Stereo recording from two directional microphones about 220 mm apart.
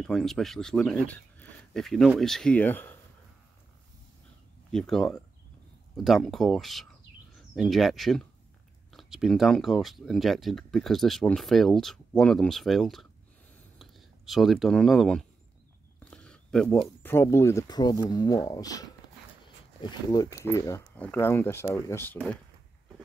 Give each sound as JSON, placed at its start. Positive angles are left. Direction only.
{"t": 0.0, "sound": "speech", "side_deg": 0}
{"t": 4.7, "sound": "speech", "side_deg": 0}